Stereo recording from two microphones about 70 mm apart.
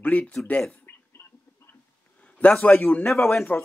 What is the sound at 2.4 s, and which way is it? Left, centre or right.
Speech, left.